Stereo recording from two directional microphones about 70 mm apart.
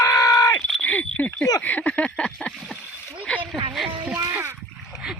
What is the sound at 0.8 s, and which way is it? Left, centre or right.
Speech, left.